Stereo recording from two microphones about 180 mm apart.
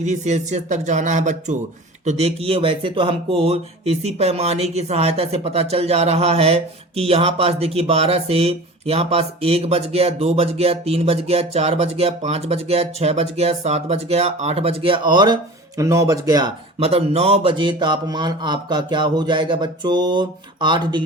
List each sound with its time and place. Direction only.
0.0 s speech: 40° right (ahead or behind); by 16.5 s 20° right (ahead or behind)
16.8 s speech: 35° right (ahead or behind)